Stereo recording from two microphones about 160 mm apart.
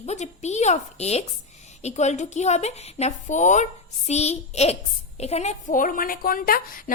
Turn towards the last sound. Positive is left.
turn(degrees=60)  # may be behind; listen again after turning